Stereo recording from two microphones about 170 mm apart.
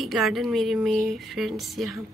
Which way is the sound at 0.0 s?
Centre (ahead or behind).